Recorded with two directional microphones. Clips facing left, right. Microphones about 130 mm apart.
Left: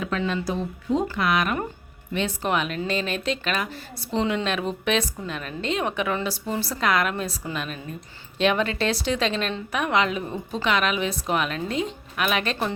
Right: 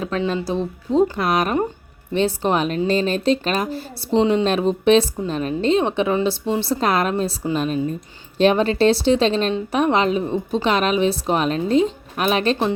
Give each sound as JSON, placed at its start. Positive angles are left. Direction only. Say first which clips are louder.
{"t": 0.3, "sound": "a woman's voice", "louder": "right 4 dB", "side_deg": -30}